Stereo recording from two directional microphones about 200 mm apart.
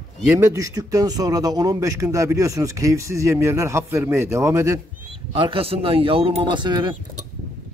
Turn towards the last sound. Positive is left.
turn(degrees=-20)  # may be behind; listen again after turning